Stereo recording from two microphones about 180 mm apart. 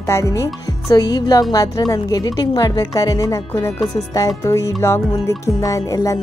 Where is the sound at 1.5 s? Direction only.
20° left (ahead or behind).